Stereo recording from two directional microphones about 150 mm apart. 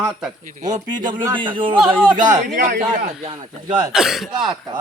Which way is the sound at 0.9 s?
30° right (ahead or behind).